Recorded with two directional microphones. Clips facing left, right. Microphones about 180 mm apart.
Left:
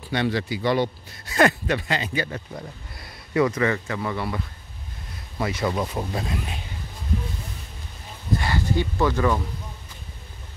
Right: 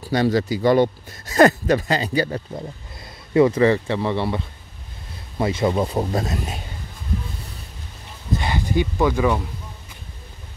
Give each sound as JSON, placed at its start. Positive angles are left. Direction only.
{"t": 0.1, "sound": "speech", "side_deg": -40}
{"t": 2.5, "sound": "speech", "side_deg": -25}
{"t": 5.4, "sound": "speech", "side_deg": -25}
{"t": 8.4, "sound": "speech", "side_deg": -20}